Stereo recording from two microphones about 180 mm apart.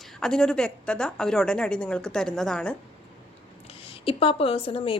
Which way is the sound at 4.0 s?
30° left (ahead or behind).